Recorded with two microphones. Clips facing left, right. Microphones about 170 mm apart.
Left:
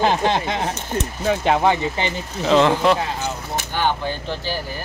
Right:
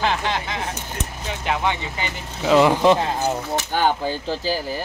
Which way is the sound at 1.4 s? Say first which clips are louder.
Left 4 dB; 40° left (ahead or behind).